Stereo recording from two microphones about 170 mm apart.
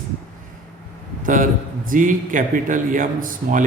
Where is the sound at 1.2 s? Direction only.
50° right (ahead or behind).